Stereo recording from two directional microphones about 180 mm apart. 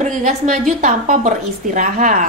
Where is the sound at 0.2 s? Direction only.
45° right (ahead or behind).